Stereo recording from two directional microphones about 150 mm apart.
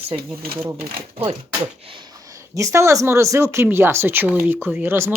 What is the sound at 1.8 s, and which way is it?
Speech, 35° right (ahead or behind).